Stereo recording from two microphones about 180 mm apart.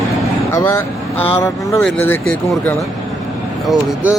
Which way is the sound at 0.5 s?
15° left (ahead or behind).